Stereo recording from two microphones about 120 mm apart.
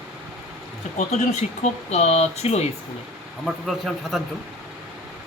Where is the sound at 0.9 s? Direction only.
70° left (ahead or behind).